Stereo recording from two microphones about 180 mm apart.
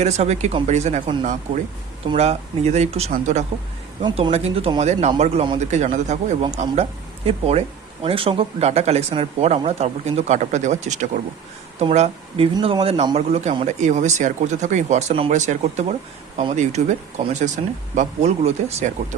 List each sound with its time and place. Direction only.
0.0 s speech: 40° right (ahead or behind)
17.9 s speech: 40° right (ahead or behind)